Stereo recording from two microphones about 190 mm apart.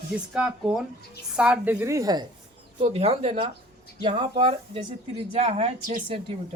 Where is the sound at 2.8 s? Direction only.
30° right (ahead or behind).